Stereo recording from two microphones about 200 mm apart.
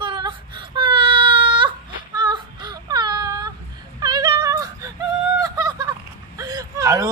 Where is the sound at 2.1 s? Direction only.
20° right (ahead or behind).